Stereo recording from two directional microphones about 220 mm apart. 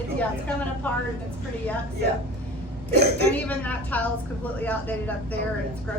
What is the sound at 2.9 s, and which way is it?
Speech, 50° right (ahead or behind).